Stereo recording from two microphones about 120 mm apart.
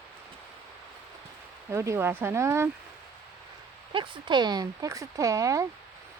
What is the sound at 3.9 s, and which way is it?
Speech, 40° right (ahead or behind).